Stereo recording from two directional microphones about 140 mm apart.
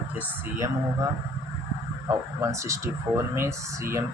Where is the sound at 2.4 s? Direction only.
20° right (ahead or behind).